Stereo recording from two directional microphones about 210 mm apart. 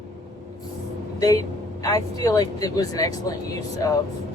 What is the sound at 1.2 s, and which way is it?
Speech, 15° left (ahead or behind).